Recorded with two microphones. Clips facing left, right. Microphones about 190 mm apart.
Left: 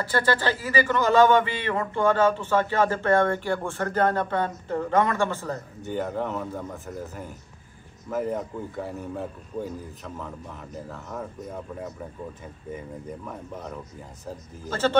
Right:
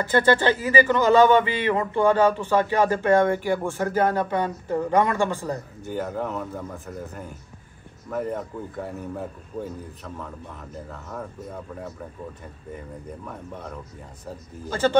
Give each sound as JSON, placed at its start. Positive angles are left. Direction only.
{"t": 0.0, "sound": "speech", "side_deg": -20}
{"t": 5.9, "sound": "a man's voice", "side_deg": 0}
{"t": 12.7, "sound": "a man's voice", "side_deg": 0}
{"t": 14.7, "sound": "speech", "side_deg": -15}